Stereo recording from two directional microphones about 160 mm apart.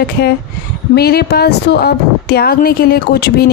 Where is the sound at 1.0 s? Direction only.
80° left.